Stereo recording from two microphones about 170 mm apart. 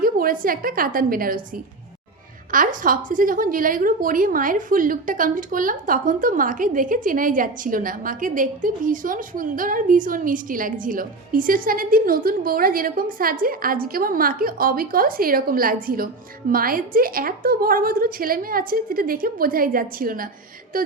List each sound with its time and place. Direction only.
0.0 s a woman's voice: 55° right (ahead or behind)
2.5 s a woman's voice: 55° right (ahead or behind)